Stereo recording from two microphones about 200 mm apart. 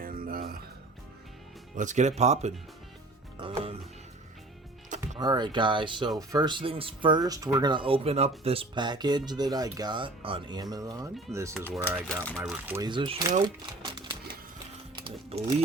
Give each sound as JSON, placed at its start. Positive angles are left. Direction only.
{"t": 0.0, "sound": "music", "side_deg": -45}
{"t": 1.7, "sound": "speech", "side_deg": -40}
{"t": 5.2, "sound": "speech", "side_deg": -20}
{"t": 11.5, "sound": "speech", "side_deg": 5}
{"t": 12.3, "sound": "speech", "side_deg": -5}
{"t": 12.9, "sound": "speech", "side_deg": -20}
{"t": 13.8, "sound": "a sound", "side_deg": -25}
{"t": 15.0, "sound": "music", "side_deg": -30}